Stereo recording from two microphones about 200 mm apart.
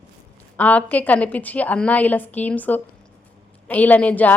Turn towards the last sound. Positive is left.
turn(degrees=5)  # may be behind; listen again after turning